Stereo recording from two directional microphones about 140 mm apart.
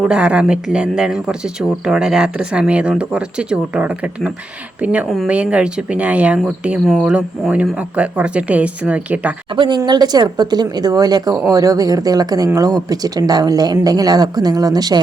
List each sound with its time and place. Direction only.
0.0 s speech: 5° right (ahead or behind)
9.6 s speech: 30° right (ahead or behind)